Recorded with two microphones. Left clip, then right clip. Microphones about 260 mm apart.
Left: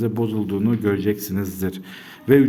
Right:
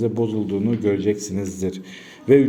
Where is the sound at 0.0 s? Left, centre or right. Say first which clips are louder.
Right 2 dB; left.